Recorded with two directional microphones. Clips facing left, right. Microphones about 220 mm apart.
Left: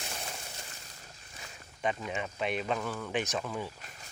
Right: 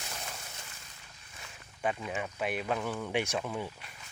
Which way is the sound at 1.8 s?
5° right (ahead or behind).